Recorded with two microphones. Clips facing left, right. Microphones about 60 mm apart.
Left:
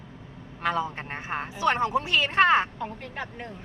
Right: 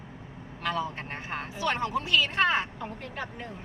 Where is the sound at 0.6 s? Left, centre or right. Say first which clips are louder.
Left 3 dB; left.